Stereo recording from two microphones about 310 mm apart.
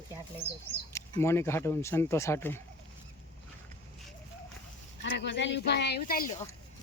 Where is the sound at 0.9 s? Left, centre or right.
Centre.